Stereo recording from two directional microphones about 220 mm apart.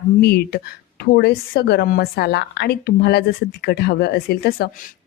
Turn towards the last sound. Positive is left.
turn(degrees=45)  # may be behind; listen again after turning